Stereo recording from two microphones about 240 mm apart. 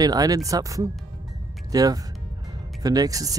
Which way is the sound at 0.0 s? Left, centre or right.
Centre.